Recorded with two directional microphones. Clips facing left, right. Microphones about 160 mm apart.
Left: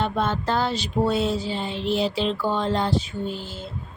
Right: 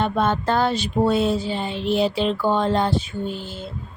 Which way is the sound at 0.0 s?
55° right (ahead or behind).